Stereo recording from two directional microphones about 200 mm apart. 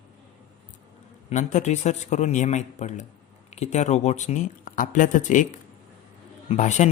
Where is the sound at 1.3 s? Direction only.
35° left (ahead or behind).